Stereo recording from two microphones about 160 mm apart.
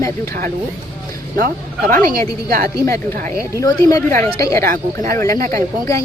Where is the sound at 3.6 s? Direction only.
20° left (ahead or behind).